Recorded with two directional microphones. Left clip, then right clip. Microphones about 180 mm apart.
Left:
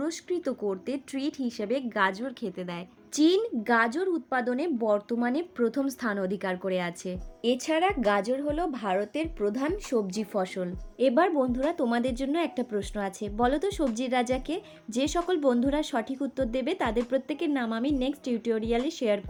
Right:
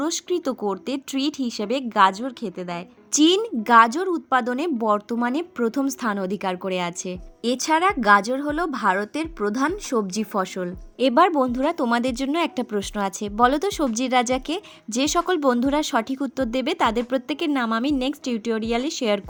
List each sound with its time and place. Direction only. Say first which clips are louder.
0.0 s a woman's voice: right 6 dB; 45° right (ahead or behind); by 2.8 s 30° right (ahead or behind)
3.1 s a woman's voice: right 5 dB; 45° right (ahead or behind)
11.0 s a woman's voice: right 6 dB; 55° right (ahead or behind)